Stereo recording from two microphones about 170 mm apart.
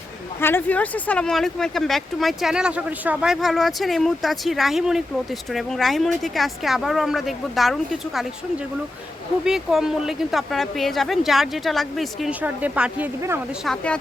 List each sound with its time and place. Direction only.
0.3 s speech: 15° left (ahead or behind)
9.4 s speech: 5° right (ahead or behind)
13.7 s speech: 5° left (ahead or behind)